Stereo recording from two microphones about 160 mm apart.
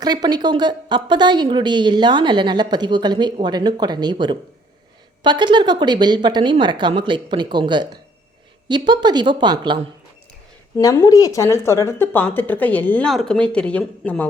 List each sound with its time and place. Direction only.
0.0 s a woman's voice: 25° right (ahead or behind)
10.8 s speech: 20° left (ahead or behind)